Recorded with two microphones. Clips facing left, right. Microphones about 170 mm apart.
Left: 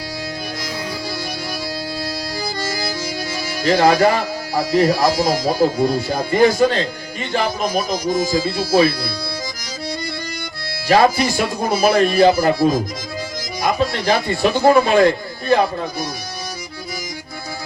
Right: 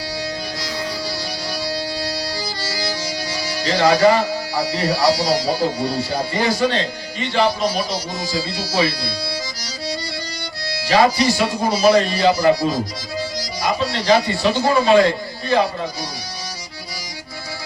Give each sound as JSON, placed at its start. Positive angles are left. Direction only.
{"t": 2.0, "sound": "music", "side_deg": 50}
{"t": 3.3, "sound": "speech", "side_deg": 50}
{"t": 10.8, "sound": "a man's voice", "side_deg": 50}